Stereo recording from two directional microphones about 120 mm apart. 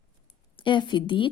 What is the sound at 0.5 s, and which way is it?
Speech, 45° left (ahead or behind).